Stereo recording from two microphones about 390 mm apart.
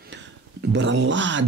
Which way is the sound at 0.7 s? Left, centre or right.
Right.